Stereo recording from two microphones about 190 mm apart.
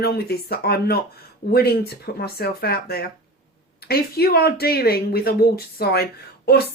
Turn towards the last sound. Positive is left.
turn(degrees=55)  # may be behind; listen again after turning